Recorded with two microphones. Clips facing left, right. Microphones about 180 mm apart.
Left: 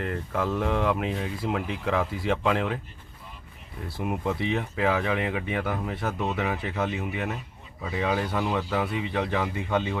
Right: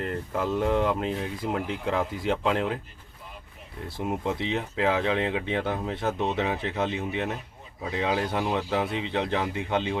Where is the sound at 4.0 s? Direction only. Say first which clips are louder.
Even; 20° right (ahead or behind).